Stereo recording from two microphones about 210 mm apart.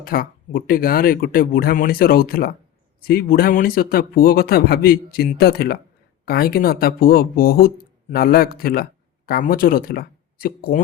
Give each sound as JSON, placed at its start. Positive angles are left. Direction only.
{"t": 0.0, "sound": "speech", "side_deg": 45}